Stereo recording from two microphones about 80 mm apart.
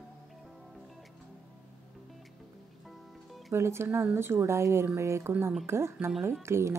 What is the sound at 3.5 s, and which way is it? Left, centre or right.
Speech, right.